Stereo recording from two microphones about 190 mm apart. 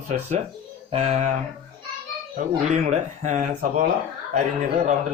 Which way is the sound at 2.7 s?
40° right (ahead or behind).